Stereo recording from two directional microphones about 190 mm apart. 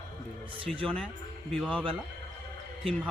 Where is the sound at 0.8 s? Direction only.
5° left (ahead or behind).